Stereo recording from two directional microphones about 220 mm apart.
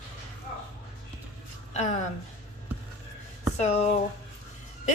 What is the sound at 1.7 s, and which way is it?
Speech, 30° left (ahead or behind).